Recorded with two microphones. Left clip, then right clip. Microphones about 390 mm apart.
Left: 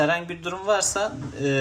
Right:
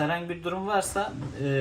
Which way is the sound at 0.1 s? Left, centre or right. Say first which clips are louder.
Left 4 dB; centre.